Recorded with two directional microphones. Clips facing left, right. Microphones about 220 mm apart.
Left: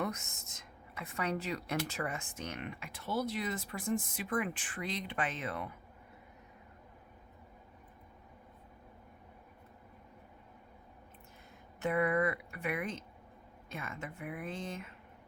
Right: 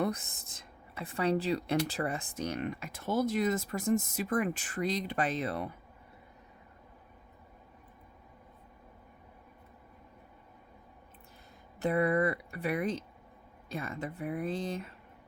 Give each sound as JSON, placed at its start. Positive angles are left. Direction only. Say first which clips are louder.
{"t": 0.0, "sound": "speech", "louder": "right 5 dB", "side_deg": -35}
{"t": 11.8, "sound": "speech", "louder": "right 3 dB", "side_deg": -35}